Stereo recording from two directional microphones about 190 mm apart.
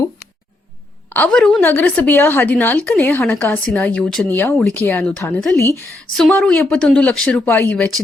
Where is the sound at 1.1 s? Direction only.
5° left (ahead or behind).